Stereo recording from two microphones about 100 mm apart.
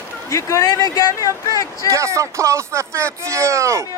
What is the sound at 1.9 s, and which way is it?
Speech, 30° right (ahead or behind).